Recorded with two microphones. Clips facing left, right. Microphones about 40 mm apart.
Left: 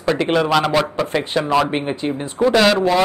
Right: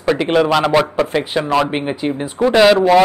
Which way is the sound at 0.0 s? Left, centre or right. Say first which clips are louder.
Right 3 dB; centre.